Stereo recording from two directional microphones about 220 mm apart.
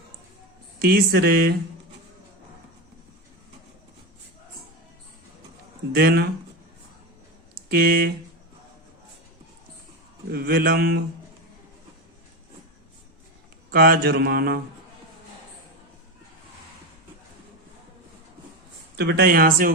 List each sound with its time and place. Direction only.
0.8 s speech: 45° right (ahead or behind)
5.9 s speech: 45° right (ahead or behind)
7.7 s speech: 40° right (ahead or behind)
10.3 s speech: 45° right (ahead or behind)
13.7 s speech: 40° right (ahead or behind)
18.9 s speech: 50° right (ahead or behind)